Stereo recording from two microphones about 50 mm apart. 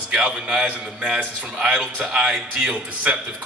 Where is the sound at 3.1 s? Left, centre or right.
Right.